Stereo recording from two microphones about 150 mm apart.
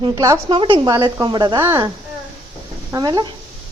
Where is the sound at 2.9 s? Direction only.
25° right (ahead or behind).